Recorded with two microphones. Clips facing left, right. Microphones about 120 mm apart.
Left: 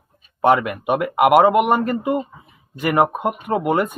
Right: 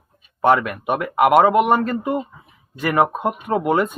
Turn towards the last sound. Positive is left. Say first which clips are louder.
# even
turn(degrees=5)  # may be behind; listen again after turning